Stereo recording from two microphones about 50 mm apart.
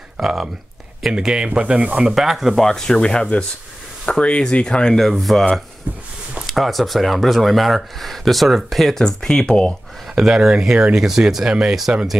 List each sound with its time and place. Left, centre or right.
0.2 s speech: centre
2.0 s speech: centre
2.6 s speech: centre
5.1 s speech: centre
5.9 s a sound: right
6.4 s speech: centre
10.1 s speech: centre